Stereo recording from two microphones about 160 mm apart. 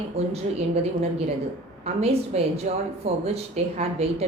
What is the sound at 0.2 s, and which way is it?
Speech, 40° right (ahead or behind).